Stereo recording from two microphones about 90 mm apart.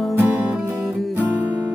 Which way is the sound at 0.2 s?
15° right (ahead or behind).